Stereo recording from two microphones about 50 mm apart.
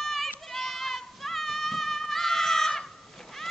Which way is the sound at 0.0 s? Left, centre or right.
Centre.